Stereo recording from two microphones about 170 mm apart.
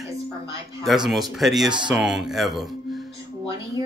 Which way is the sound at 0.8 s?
Centre (ahead or behind).